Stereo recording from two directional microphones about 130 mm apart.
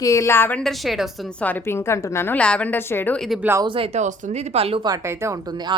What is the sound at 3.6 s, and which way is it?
Speech, 45° right (ahead or behind).